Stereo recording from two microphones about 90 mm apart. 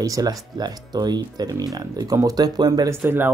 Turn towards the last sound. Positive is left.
turn(degrees=-25)  # may be behind; listen again after turning